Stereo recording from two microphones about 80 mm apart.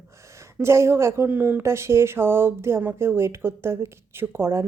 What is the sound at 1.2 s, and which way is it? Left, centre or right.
Speech, right.